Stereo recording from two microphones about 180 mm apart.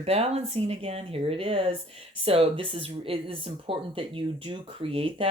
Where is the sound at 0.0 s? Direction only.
35° right (ahead or behind).